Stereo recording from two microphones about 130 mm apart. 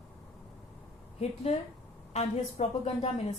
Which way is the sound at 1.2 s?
55° left (ahead or behind).